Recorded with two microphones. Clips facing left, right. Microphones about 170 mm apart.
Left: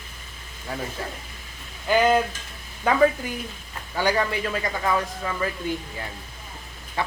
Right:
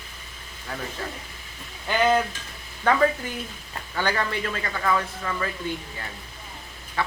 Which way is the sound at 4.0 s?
10° left (ahead or behind).